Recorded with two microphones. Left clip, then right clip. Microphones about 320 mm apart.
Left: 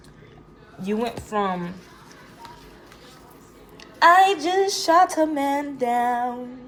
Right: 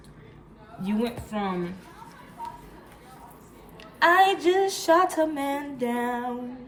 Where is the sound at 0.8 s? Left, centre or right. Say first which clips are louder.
Left 3 dB; left.